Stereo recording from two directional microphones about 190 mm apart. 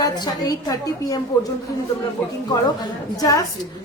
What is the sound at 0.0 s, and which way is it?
A woman's voice, 20° left (ahead or behind).